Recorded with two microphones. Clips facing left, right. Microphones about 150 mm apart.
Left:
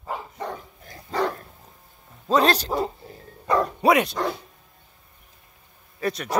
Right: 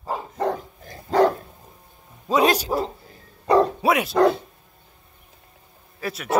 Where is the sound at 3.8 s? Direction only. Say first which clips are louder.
Left 2 dB; centre (ahead or behind).